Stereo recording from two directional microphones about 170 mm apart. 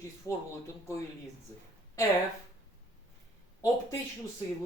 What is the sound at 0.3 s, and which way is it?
Speech, 15° left (ahead or behind).